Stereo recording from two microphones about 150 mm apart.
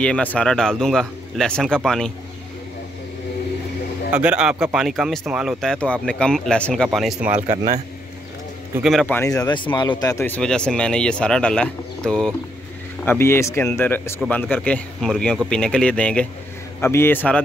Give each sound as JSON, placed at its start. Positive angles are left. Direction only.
{"t": 0.0, "sound": "speech", "side_deg": 10}
{"t": 4.1, "sound": "a man's voice", "side_deg": -10}
{"t": 7.4, "sound": "speech", "side_deg": -55}
{"t": 9.0, "sound": "speech", "side_deg": 10}
{"t": 9.4, "sound": "speech", "side_deg": 30}
{"t": 13.0, "sound": "speech", "side_deg": 15}